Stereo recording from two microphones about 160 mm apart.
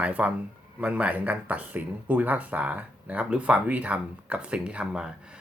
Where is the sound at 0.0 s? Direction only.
10° right (ahead or behind).